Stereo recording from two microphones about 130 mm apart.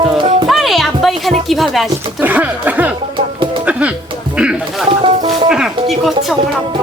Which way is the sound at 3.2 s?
40° right (ahead or behind).